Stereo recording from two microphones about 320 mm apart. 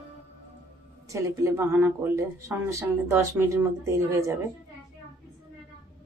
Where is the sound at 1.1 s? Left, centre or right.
Centre.